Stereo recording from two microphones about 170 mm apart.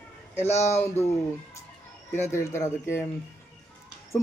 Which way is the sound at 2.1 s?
15° left (ahead or behind).